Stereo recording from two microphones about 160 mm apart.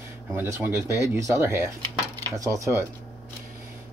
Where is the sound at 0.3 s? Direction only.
15° right (ahead or behind).